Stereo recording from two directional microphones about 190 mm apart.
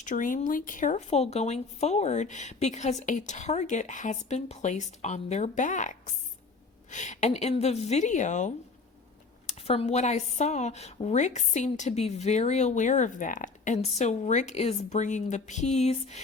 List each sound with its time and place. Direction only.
0.0 s speech: 45° left (ahead or behind)
9.6 s speech: 30° left (ahead or behind)